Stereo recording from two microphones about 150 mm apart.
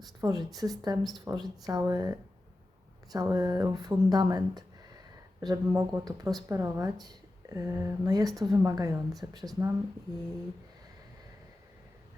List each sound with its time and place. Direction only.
0.2 s speech: 25° right (ahead or behind)